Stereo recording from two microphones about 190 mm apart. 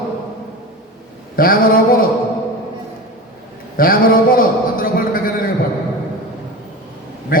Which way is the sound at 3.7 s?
50° left (ahead or behind).